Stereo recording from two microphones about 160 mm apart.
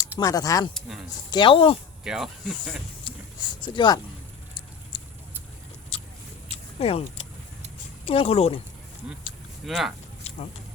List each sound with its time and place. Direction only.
0.2 s speech: 20° left (ahead or behind)
0.7 s speech: centre (ahead or behind)
1.3 s speech: 30° left (ahead or behind)
2.0 s speech: 5° right (ahead or behind)
3.6 s speech: 30° left (ahead or behind)
4.9 s a sound: 35° left (ahead or behind)
6.7 s speech: 40° left (ahead or behind)
9.6 s speech: centre (ahead or behind)
10.3 s a sound: 40° left (ahead or behind)